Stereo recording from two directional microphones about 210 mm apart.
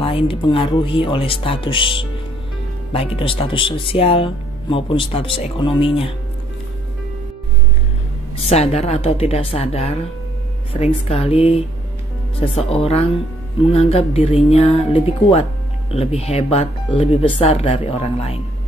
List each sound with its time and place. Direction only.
0.0 s speech: 25° left (ahead or behind)
8.4 s speech: 30° left (ahead or behind)